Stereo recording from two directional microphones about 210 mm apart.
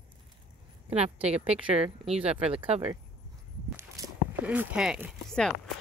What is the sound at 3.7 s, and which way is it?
Speech, 15° right (ahead or behind).